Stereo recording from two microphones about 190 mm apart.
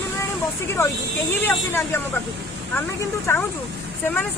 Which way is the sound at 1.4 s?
10° left (ahead or behind).